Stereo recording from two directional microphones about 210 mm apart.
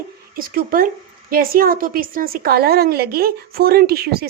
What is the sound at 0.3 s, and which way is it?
A woman's voice, 45° right (ahead or behind).